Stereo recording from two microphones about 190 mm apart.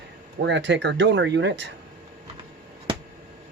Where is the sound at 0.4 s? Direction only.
70° right (ahead or behind).